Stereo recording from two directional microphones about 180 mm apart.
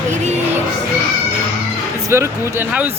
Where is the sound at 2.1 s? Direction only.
15° right (ahead or behind).